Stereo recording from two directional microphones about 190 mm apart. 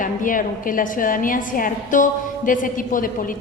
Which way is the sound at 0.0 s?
45° left (ahead or behind).